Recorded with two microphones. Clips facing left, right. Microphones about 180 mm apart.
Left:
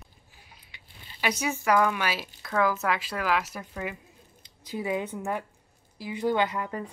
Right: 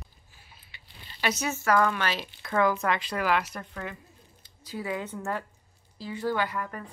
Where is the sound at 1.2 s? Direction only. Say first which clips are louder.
Left 1 dB; 10° left (ahead or behind).